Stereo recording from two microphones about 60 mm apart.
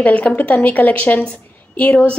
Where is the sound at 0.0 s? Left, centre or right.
Left.